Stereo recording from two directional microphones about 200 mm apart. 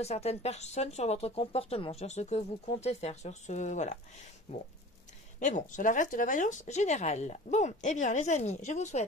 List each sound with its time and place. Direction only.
0.0 s speech: 30° left (ahead or behind)